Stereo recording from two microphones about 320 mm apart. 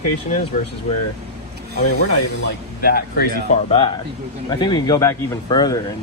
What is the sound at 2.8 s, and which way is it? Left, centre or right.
Speech, left.